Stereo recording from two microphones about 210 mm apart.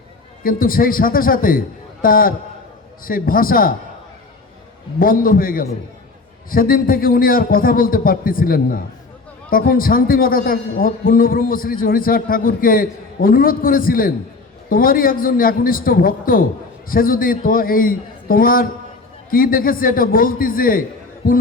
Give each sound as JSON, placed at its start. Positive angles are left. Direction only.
{"t": 0.4, "sound": "a man's voice", "side_deg": 45}
{"t": 4.9, "sound": "a man's voice", "side_deg": 40}